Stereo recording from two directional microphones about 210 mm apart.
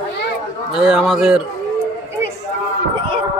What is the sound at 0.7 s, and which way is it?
Speech, centre (ahead or behind).